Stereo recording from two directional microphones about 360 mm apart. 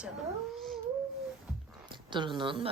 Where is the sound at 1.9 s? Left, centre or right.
Centre.